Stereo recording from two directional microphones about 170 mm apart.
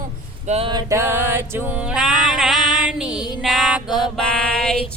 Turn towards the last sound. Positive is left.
turn(degrees=5)  # may be behind; listen again after turning